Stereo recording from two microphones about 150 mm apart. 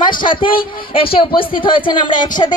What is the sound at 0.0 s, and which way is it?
A woman's voice, 30° left (ahead or behind).